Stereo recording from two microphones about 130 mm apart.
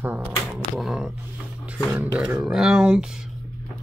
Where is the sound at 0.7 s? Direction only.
5° right (ahead or behind).